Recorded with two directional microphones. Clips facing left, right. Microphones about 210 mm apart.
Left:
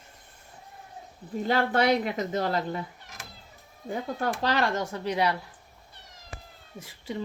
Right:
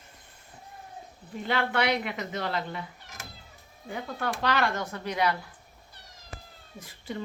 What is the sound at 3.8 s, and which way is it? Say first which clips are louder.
Speech: left 3 dB; 40° left (ahead or behind).